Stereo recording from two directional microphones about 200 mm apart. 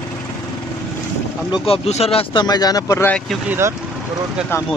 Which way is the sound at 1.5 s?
30° left (ahead or behind).